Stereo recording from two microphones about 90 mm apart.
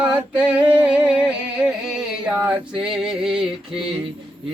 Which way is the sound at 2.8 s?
10° right (ahead or behind).